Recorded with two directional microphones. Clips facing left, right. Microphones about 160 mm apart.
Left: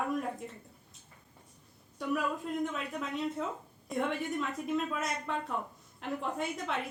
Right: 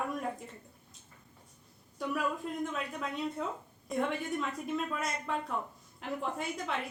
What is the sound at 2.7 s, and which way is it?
A woman's voice, centre (ahead or behind).